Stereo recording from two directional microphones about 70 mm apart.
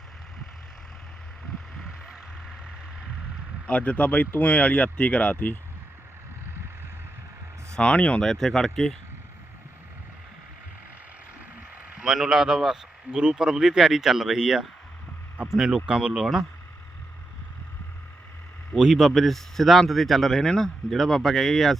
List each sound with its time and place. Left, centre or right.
1.8 s vehicle: centre
3.7 s speech: centre
7.7 s speech: centre
8.2 s speech: centre
11.9 s speech: centre
18.8 s speech: centre